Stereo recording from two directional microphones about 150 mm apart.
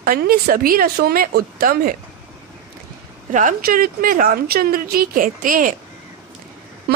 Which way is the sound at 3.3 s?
60° right (ahead or behind).